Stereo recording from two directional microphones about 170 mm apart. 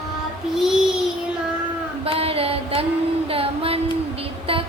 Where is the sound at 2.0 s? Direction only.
35° right (ahead or behind).